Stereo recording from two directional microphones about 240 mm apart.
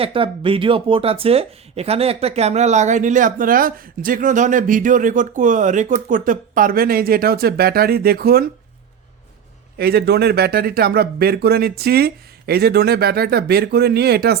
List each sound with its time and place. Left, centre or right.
0.0 s speech: right
9.7 s speech: right